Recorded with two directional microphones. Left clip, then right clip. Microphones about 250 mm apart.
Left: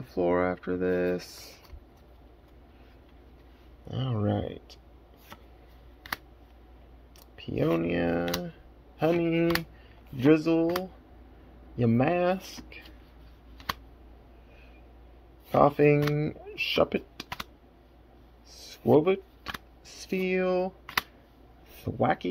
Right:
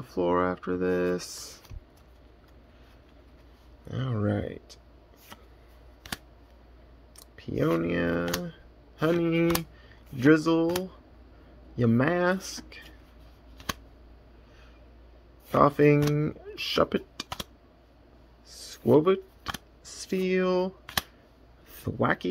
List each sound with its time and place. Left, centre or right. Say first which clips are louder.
0.0 s speech: even; centre
3.8 s speech: even; centre
7.2 s speech: right 1 dB; centre
11.7 s speech: even; centre
15.5 s speech: even; centre
18.5 s a sound: even; centre
21.7 s speech: even; centre